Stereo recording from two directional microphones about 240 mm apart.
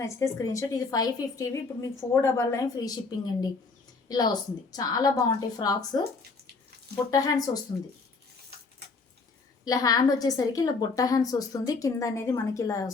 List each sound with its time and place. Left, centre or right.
0.0 s a woman's voice: centre
7.1 s a woman's voice: centre
9.6 s a woman's voice: centre